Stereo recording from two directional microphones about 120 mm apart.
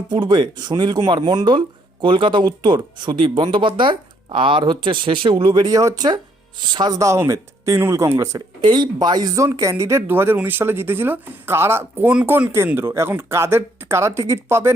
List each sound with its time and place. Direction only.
0.1 s speech: 40° right (ahead or behind)
8.6 s speech: 35° right (ahead or behind)